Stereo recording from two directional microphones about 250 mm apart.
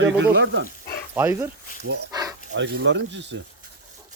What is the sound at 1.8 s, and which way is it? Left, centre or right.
Speech, right.